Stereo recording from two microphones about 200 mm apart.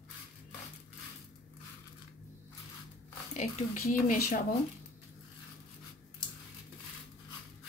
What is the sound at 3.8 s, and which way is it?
Speech, 45° left (ahead or behind).